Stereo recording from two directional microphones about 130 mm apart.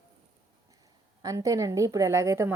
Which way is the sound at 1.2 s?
25° right (ahead or behind).